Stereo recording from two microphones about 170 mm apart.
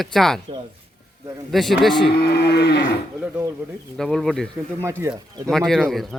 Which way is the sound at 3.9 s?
Centre (ahead or behind).